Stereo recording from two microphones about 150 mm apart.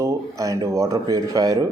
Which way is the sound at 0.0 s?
20° right (ahead or behind).